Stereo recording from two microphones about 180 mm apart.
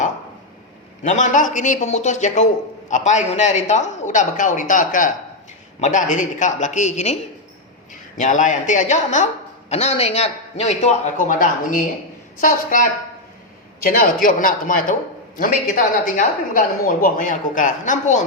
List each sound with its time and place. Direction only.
1.0 s a woman's voice: 45° left (ahead or behind)
8.2 s a man's voice: 45° left (ahead or behind)